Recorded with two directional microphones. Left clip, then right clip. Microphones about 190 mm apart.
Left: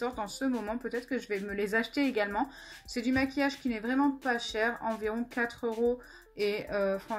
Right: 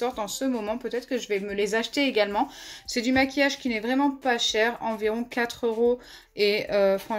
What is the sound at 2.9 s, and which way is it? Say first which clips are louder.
Speech: right 7 dB; 35° right (ahead or behind).